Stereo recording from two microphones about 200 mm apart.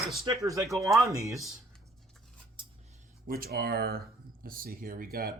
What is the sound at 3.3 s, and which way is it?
Speech, 50° right (ahead or behind).